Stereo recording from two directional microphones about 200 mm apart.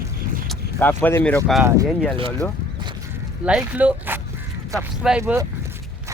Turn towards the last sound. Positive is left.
turn(degrees=-10)  # may be behind; listen again after turning